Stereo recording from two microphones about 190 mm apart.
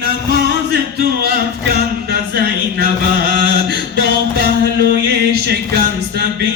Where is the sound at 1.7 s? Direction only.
55° right (ahead or behind).